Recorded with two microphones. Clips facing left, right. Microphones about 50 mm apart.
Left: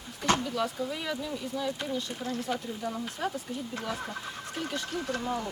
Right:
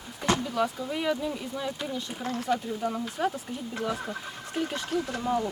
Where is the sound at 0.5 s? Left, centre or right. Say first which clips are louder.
Right 3 dB; centre.